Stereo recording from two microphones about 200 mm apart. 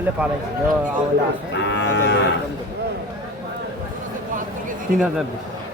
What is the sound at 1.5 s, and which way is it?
Moo, 60° left (ahead or behind).